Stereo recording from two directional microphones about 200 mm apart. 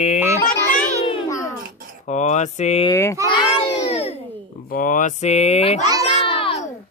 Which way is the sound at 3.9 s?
30° left (ahead or behind).